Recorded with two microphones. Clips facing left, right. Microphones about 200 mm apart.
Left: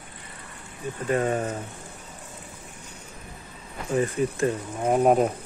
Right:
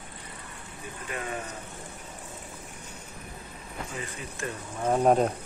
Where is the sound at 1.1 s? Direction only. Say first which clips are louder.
Left 11 dB; 40° left (ahead or behind).